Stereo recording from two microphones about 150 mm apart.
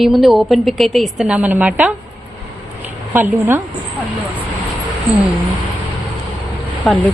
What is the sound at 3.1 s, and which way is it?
Speech, 15° right (ahead or behind).